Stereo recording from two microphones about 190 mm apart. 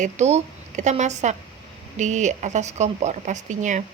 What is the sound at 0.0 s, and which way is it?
Speech, 35° right (ahead or behind).